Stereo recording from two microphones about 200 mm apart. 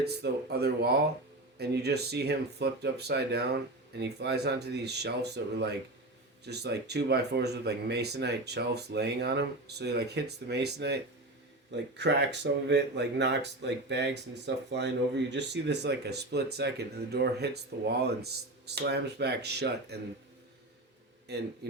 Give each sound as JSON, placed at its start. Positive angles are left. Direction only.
{"t": 0.0, "sound": "speech", "side_deg": -55}
{"t": 21.3, "sound": "speech", "side_deg": -55}